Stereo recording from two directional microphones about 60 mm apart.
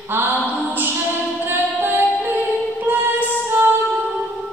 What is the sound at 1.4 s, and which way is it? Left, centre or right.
Music, right.